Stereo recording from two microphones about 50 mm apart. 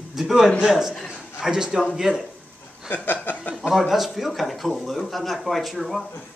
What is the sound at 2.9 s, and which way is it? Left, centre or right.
Chuckle, left.